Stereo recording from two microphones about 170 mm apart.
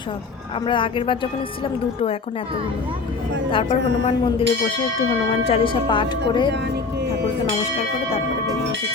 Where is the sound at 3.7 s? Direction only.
90° right.